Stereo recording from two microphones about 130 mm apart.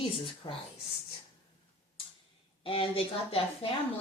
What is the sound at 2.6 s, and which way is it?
A woman's voice, 45° left (ahead or behind).